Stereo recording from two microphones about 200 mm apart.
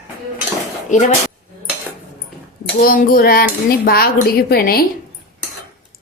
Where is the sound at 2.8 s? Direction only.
45° left (ahead or behind).